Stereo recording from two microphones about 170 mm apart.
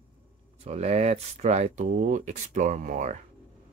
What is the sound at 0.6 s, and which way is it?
Speech, 40° right (ahead or behind).